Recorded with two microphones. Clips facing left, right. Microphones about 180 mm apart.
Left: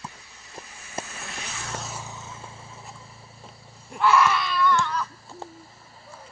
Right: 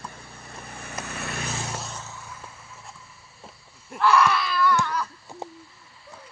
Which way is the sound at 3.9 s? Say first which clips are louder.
Even; centre (ahead or behind).